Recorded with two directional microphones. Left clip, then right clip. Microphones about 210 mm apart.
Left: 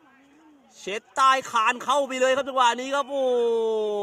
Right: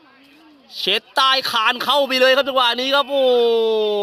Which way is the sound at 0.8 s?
25° right (ahead or behind).